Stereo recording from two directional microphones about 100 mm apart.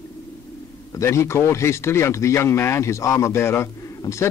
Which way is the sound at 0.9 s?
30° left (ahead or behind).